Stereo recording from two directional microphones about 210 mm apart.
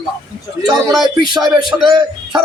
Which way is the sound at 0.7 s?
Centre (ahead or behind).